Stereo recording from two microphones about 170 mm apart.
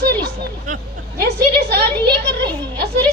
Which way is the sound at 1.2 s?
70° right (ahead or behind).